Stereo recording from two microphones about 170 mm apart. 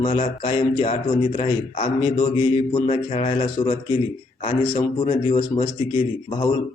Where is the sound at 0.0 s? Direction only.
35° left (ahead or behind).